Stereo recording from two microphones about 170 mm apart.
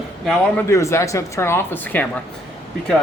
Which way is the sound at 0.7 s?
15° left (ahead or behind).